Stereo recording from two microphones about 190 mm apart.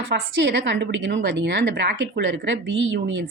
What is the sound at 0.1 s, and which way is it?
A woman's voice, 65° right (ahead or behind).